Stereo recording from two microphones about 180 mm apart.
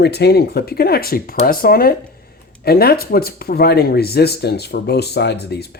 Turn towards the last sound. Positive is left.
turn(degrees=65)  # may be behind; listen again after turning